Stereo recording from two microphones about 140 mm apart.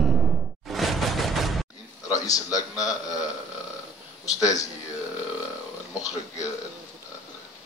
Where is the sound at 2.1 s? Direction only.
25° left (ahead or behind).